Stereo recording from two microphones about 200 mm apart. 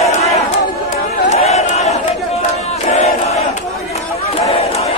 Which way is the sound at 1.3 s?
35° left (ahead or behind).